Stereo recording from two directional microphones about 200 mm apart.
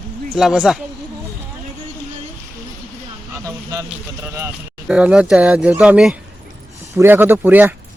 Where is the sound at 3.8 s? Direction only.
10° right (ahead or behind).